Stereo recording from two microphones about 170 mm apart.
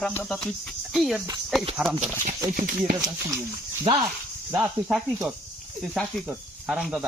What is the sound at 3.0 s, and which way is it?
Speech, 20° right (ahead or behind).